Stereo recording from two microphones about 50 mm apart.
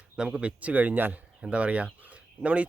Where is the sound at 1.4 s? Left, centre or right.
Right.